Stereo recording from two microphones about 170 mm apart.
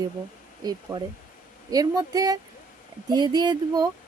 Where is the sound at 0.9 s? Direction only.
20° right (ahead or behind).